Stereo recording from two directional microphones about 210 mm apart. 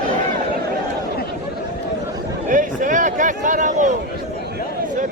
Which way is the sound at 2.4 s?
40° right (ahead or behind).